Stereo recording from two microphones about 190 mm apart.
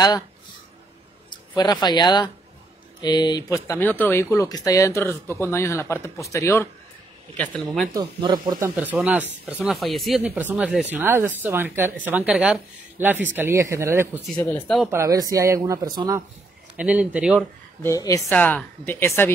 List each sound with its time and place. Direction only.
1.5 s speech: 25° left (ahead or behind)
7.9 s speech: 20° right (ahead or behind)
14.3 s speech: 15° left (ahead or behind)
14.9 s speech: 15° right (ahead or behind)
16.7 s speech: 5° right (ahead or behind)
17.8 s speech: 15° left (ahead or behind)